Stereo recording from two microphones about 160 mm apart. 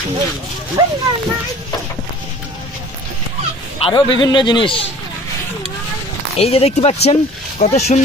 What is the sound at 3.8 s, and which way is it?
A man's voice, 30° left (ahead or behind).